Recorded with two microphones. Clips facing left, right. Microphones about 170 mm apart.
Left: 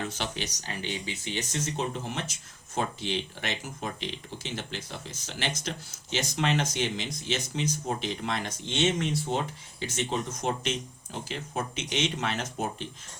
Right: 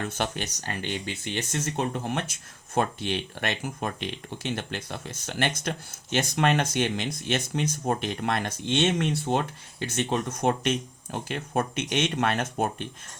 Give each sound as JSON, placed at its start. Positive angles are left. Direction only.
{"t": 0.1, "sound": "speech", "side_deg": -55}